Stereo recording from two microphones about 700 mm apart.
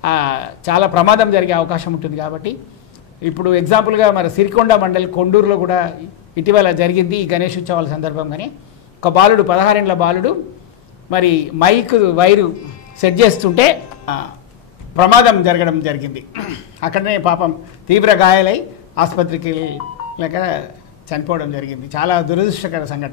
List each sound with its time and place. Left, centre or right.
0.0 s a man's voice: left
15.0 s a man's voice: left